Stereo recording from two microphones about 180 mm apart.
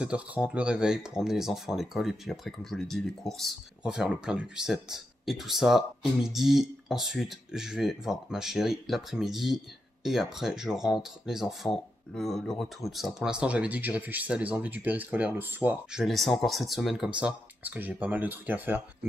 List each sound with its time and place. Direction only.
0.0 s speech: 5° right (ahead or behind)